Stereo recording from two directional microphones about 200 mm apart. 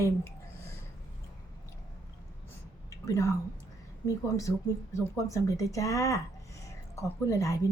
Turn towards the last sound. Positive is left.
turn(degrees=15)  # may be behind; listen again after turning